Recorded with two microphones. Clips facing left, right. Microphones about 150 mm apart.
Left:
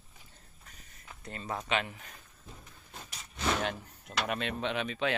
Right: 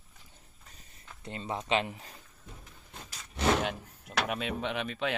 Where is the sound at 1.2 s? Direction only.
25° right (ahead or behind).